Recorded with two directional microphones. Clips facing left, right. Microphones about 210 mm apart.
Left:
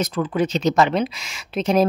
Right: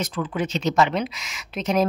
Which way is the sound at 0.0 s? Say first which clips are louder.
Left 5 dB; 40° left (ahead or behind).